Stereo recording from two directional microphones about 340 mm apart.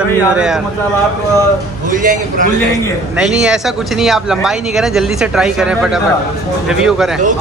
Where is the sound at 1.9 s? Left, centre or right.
Right.